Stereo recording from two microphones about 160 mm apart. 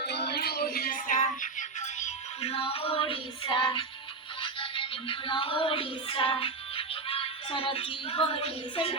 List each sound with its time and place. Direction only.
0.0 s music: 90° left; by 9.0 s 35° left (ahead or behind)